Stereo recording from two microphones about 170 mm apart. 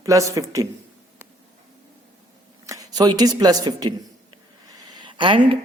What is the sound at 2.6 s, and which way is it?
A man's voice, 20° right (ahead or behind).